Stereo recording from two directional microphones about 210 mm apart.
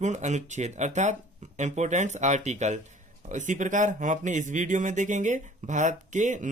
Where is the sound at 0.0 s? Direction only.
35° right (ahead or behind).